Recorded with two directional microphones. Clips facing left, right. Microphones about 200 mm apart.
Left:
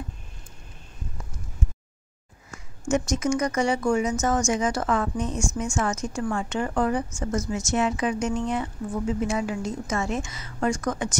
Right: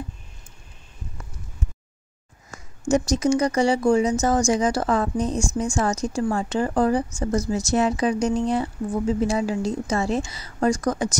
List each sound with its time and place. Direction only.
2.9 s a woman's voice: 35° right (ahead or behind)